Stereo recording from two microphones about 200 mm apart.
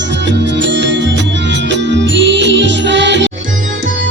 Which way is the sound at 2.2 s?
60° right (ahead or behind).